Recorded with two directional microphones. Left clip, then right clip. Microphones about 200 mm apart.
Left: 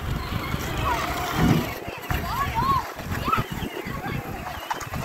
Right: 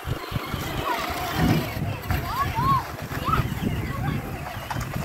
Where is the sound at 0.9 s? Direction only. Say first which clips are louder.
Left 1 dB; centre (ahead or behind).